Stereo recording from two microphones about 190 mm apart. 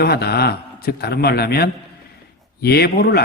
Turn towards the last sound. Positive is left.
turn(degrees=55)  # may be behind; listen again after turning